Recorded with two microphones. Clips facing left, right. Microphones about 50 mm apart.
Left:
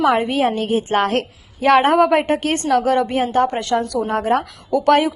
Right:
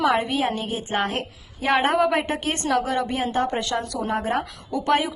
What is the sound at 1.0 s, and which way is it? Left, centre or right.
Speech, left.